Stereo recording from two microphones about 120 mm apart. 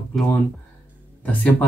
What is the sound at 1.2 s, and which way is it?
Speech, 10° left (ahead or behind).